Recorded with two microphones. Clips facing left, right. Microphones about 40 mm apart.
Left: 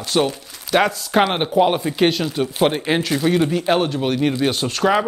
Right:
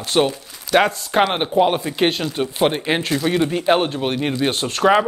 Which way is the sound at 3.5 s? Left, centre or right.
Centre.